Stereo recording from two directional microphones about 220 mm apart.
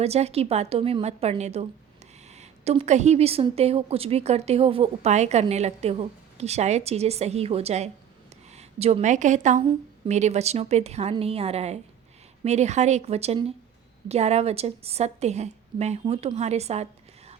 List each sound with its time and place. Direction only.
0.0 s a woman's voice: 30° right (ahead or behind)